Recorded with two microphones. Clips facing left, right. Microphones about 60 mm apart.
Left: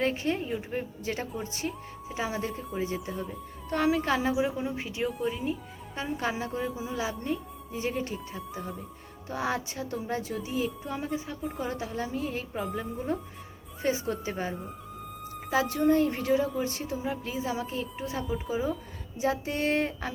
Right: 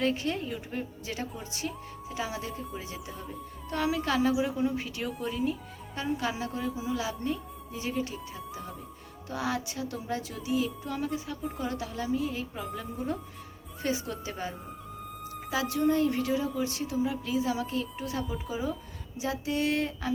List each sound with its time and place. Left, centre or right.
0.0 s a woman's voice: left
6.1 s a woman's voice: left
19.2 s speech: left